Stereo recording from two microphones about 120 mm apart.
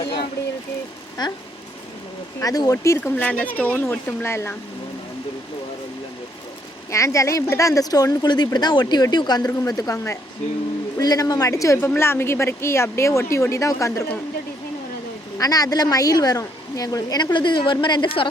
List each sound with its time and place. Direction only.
0.0 s a sound: 45° left (ahead or behind)
1.2 s a woman's voice: 35° left (ahead or behind)
2.4 s a woman's voice: 30° left (ahead or behind)
3.0 s speech: 10° left (ahead or behind)
6.9 s a woman's voice: 25° left (ahead or behind)
15.4 s a woman's voice: 30° left (ahead or behind)